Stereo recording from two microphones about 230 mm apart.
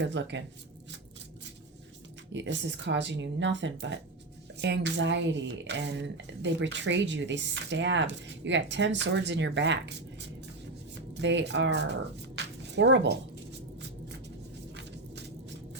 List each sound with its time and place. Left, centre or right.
0.0 s speech: right
2.3 s speech: right
12.4 s a sound: right